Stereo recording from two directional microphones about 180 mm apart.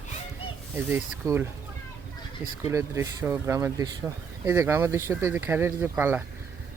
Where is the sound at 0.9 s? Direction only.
15° right (ahead or behind).